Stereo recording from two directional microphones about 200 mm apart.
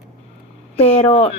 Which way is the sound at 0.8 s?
30° left (ahead or behind).